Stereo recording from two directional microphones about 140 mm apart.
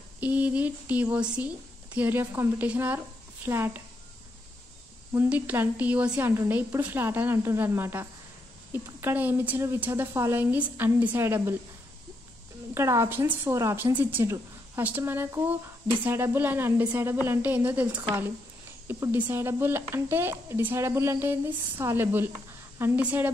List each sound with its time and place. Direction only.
0.2 s a woman's voice: 10° right (ahead or behind)
5.1 s a woman's voice: 15° right (ahead or behind)
12.7 s a woman's voice: 20° right (ahead or behind)